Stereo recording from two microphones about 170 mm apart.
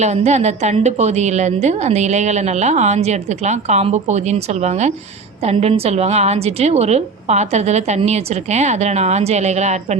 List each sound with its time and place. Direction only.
0.0 s a woman's voice: 40° right (ahead or behind)